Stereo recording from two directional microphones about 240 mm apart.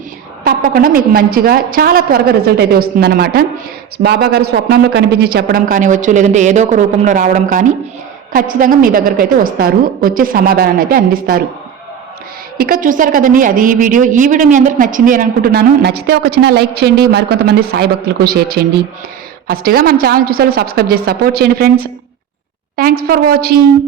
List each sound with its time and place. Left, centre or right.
0.4 s a woman's voice: right
12.5 s a woman's voice: right